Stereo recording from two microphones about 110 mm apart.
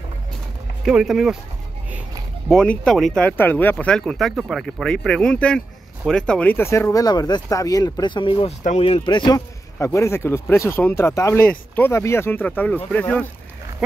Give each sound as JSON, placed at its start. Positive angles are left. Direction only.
{"t": 0.8, "sound": "speech", "side_deg": -5}
{"t": 2.5, "sound": "speech", "side_deg": 10}
{"t": 8.5, "sound": "speech", "side_deg": 75}
{"t": 9.8, "sound": "speech", "side_deg": 25}